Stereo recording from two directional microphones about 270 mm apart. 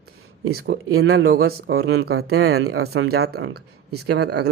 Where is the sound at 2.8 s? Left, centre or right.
Right.